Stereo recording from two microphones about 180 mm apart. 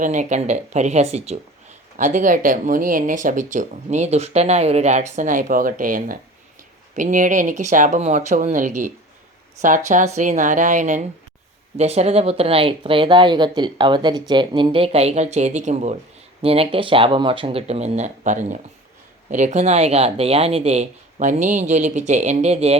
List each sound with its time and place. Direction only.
0.0 s speech: 45° right (ahead or behind)